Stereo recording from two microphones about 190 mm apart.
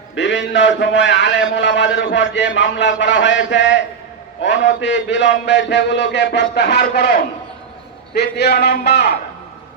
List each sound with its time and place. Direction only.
0.2 s a man's voice: 70° left (ahead or behind)